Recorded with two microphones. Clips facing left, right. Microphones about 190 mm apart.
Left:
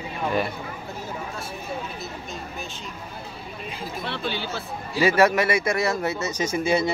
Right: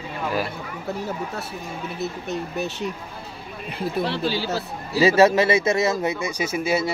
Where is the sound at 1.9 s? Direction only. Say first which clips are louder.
Right 7 dB; 65° right (ahead or behind).